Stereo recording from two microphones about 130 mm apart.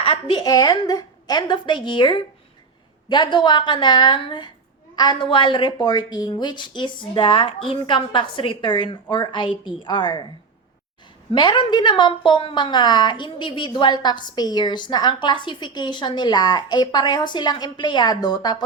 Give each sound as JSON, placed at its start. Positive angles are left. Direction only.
{"t": 0.0, "sound": "a woman's voice", "side_deg": 40}
{"t": 11.3, "sound": "a woman's voice", "side_deg": 40}